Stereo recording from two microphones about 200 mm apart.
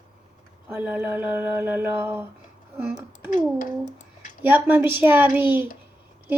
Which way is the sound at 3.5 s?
40° left (ahead or behind).